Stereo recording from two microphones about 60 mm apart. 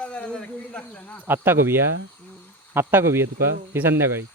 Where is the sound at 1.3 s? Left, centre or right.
Right.